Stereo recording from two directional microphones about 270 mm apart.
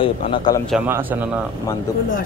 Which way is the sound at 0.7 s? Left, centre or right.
Centre.